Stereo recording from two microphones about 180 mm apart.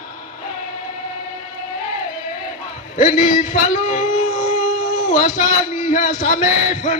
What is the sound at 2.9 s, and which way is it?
Speech, 50° left (ahead or behind).